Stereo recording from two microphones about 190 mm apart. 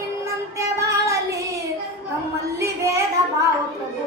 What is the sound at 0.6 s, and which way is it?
Child singing, 15° right (ahead or behind).